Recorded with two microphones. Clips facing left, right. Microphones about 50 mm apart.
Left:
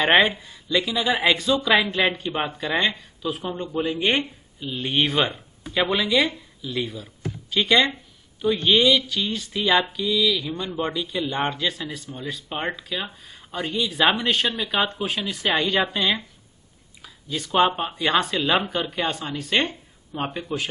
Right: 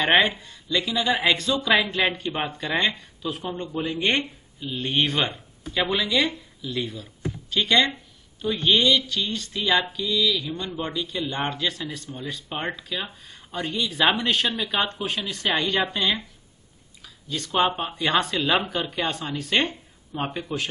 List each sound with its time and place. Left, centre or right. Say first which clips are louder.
0.0 s speech: left 2 dB; centre